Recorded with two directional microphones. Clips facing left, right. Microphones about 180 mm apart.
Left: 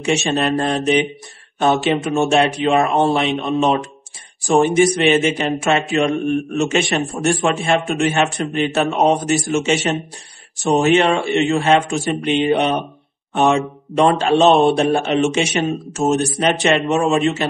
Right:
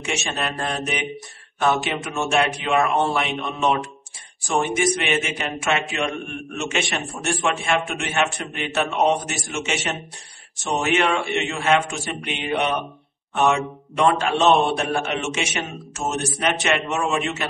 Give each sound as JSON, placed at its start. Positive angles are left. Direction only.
{"t": 0.0, "sound": "speech", "side_deg": 35}